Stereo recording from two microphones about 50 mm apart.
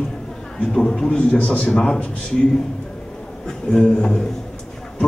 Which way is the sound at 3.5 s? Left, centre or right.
Centre.